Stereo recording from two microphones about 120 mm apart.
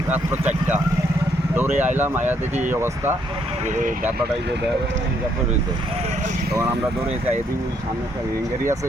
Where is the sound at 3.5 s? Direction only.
70° right (ahead or behind).